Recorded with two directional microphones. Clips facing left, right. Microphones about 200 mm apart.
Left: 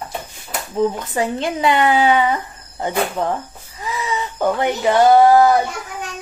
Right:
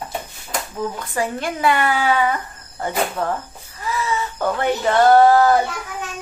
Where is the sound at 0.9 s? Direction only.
20° left (ahead or behind).